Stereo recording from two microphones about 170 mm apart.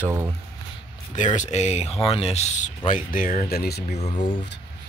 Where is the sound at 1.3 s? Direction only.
40° left (ahead or behind).